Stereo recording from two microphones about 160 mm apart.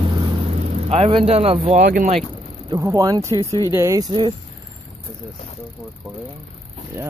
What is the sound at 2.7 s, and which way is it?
Speech, 20° right (ahead or behind).